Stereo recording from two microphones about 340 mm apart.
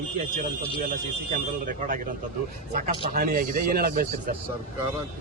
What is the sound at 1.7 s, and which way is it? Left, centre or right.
A man's voice, right.